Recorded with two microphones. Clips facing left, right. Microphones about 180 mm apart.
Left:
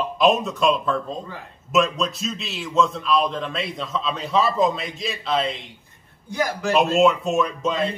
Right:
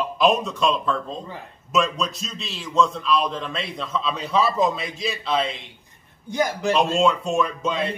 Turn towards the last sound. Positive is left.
turn(degrees=0)  # may be behind; listen again after turning